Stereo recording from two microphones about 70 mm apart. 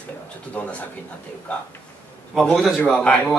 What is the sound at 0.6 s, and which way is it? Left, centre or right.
Speech, centre.